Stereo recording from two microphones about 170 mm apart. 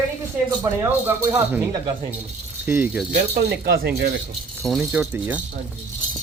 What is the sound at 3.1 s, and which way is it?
Speech, 65° right (ahead or behind).